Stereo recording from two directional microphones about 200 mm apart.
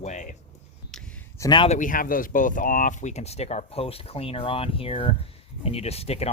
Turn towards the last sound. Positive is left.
turn(degrees=30)  # may be behind; listen again after turning